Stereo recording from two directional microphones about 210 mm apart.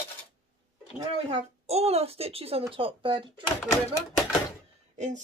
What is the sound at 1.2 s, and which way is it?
Speech, 30° right (ahead or behind).